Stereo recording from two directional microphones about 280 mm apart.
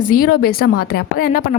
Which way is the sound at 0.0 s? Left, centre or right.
Left.